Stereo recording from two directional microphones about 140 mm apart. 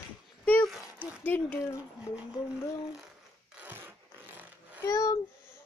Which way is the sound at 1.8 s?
5° right (ahead or behind).